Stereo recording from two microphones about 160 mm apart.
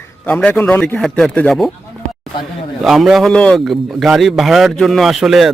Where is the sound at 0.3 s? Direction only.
10° left (ahead or behind).